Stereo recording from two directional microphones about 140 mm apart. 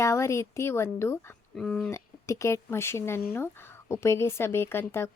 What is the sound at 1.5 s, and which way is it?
Speech, 5° left (ahead or behind).